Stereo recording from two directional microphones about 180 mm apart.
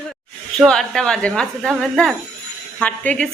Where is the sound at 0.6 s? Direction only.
5° left (ahead or behind).